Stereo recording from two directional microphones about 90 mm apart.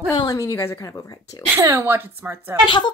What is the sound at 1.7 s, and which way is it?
Speech, 25° right (ahead or behind).